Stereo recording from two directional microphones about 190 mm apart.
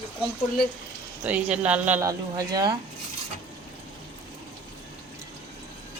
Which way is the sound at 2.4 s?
20° right (ahead or behind).